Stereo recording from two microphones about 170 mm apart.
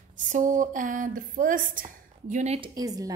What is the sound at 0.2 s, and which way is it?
Speech, 50° right (ahead or behind).